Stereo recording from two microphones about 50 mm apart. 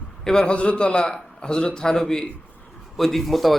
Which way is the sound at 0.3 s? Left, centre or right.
Centre.